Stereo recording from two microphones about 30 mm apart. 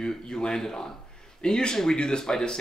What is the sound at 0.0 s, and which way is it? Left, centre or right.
Speech, left.